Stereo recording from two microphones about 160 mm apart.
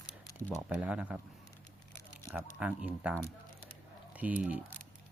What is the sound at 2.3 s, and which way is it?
Speech, 10° right (ahead or behind).